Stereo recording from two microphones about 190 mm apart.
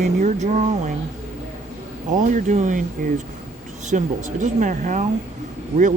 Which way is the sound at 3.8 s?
40° right (ahead or behind).